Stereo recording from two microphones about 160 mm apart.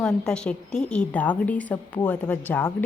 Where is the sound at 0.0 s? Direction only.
5° left (ahead or behind).